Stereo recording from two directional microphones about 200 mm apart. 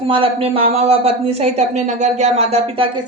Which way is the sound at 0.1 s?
30° right (ahead or behind).